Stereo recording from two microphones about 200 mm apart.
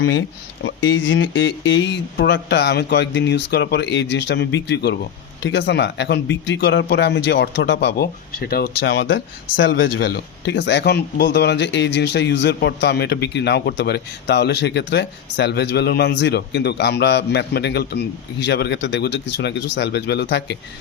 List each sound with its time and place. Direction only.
0.0 s speech: 70° left (ahead or behind)